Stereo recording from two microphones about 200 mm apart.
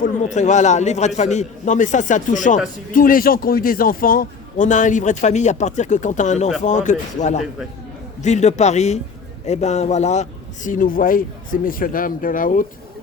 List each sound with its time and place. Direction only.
0.0 s a man's voice: 35° left (ahead or behind)